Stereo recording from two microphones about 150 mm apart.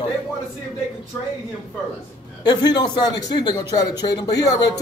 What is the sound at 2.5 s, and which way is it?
Speech, 30° left (ahead or behind).